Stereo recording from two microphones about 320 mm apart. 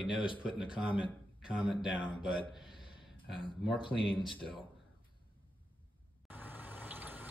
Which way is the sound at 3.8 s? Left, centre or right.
Centre.